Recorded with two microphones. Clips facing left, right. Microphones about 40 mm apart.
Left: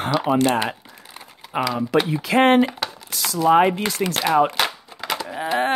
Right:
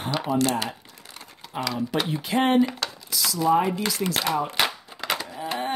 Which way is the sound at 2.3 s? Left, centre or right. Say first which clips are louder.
Left 5 dB; left.